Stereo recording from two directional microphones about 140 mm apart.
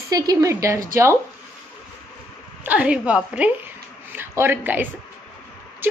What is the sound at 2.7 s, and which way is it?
A woman's voice, 10° right (ahead or behind).